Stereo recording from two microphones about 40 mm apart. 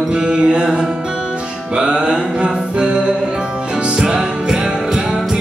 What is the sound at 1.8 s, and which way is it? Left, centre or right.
Music, right.